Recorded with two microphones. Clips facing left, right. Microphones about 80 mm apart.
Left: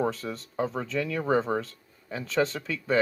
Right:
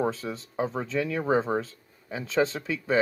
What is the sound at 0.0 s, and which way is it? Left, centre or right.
Speech, centre.